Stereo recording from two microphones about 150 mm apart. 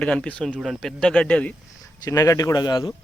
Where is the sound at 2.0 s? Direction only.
20° left (ahead or behind).